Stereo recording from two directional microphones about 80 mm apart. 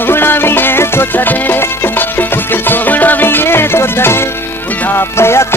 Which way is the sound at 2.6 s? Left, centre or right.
Left.